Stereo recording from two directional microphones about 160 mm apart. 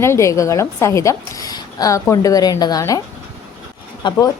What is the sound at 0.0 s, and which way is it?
A woman's voice, 15° left (ahead or behind).